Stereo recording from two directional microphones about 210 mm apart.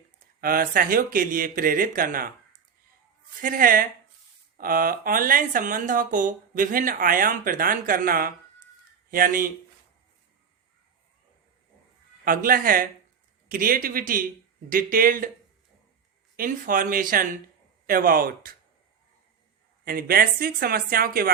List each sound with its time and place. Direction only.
0.4 s speech: 45° right (ahead or behind)
3.4 s speech: 40° right (ahead or behind)
12.2 s speech: 45° right (ahead or behind)
16.4 s speech: 40° right (ahead or behind)
19.8 s speech: 45° right (ahead or behind)